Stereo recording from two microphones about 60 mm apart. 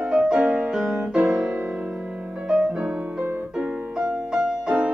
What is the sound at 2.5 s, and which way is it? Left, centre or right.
Music, centre.